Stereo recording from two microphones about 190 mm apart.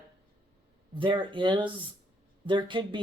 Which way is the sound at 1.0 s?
25° right (ahead or behind).